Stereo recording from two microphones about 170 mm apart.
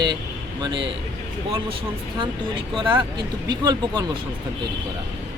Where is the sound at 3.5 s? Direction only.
25° right (ahead or behind).